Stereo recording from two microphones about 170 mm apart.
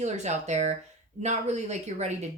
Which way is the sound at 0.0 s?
45° right (ahead or behind).